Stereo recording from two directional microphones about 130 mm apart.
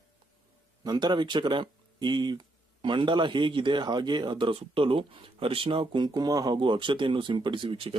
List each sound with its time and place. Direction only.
0.9 s speech: 35° right (ahead or behind)
6.1 s speech: 30° right (ahead or behind)